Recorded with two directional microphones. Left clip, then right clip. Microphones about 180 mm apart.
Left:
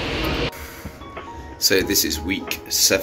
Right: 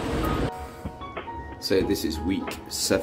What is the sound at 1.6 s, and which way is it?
Speech, 15° right (ahead or behind).